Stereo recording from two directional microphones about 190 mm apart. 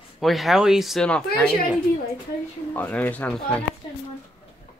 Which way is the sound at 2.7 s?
10° left (ahead or behind).